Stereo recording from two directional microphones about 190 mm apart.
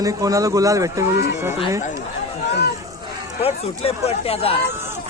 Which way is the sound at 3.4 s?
30° left (ahead or behind).